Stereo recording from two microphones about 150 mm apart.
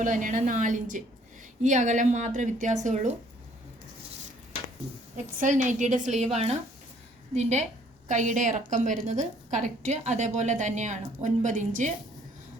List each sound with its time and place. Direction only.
0.0 s a woman's voice: 60° right (ahead or behind)
5.1 s a woman's voice: 55° right (ahead or behind)